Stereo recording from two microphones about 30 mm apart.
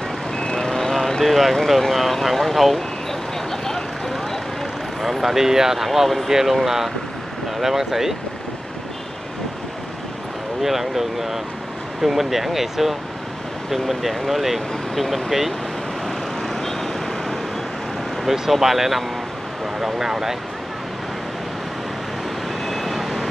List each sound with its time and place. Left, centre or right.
0.6 s vehicle: centre
1.2 s speech: centre
5.2 s speech: centre
10.6 s speech: centre
16.4 s vehicle: centre
18.2 s speech: centre
22.7 s vehicle: centre